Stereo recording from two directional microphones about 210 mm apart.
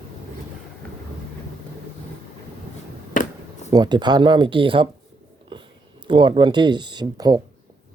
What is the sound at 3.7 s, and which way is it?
Speech, 20° right (ahead or behind).